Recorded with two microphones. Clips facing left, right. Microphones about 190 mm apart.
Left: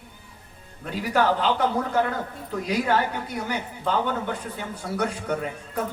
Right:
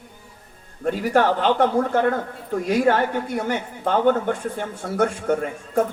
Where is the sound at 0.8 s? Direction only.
45° right (ahead or behind).